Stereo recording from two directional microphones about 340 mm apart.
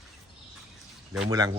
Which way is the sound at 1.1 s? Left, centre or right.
Centre.